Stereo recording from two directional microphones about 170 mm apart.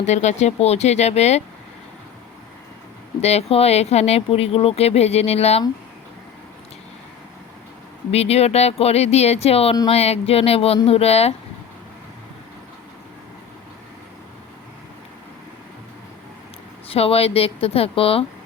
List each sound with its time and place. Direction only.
0.0 s speech: 40° left (ahead or behind)
3.2 s speech: 40° left (ahead or behind)
8.1 s speech: 35° left (ahead or behind)
16.9 s speech: 35° left (ahead or behind)